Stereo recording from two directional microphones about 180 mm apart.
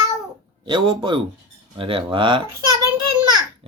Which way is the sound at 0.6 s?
25° right (ahead or behind).